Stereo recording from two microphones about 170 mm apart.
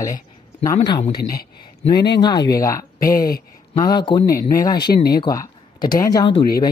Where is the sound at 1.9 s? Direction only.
80° left.